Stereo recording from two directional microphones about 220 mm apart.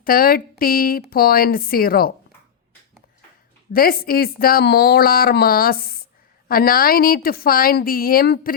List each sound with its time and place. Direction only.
0.0 s a woman's voice: 40° left (ahead or behind)
3.7 s a woman's voice: 40° left (ahead or behind)